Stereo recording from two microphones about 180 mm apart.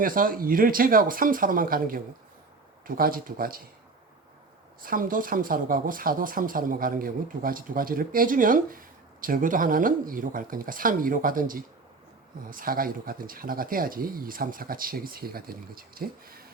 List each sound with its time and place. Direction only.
0.0 s speech: 50° right (ahead or behind)
4.8 s speech: 50° right (ahead or behind)